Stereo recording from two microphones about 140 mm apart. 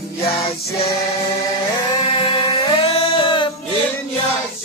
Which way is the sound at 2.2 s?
40° left (ahead or behind).